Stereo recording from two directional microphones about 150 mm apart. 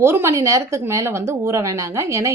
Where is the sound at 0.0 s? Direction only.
15° right (ahead or behind).